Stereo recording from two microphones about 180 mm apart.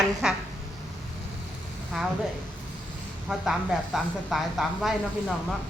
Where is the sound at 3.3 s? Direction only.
Centre (ahead or behind).